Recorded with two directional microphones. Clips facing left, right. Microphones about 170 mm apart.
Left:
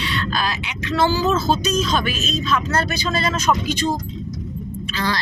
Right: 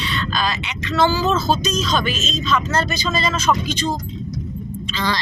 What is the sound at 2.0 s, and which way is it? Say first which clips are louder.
Speech: right 1 dB; 65° left (ahead or behind).